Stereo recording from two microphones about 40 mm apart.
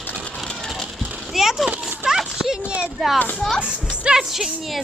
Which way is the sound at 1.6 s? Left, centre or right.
Centre.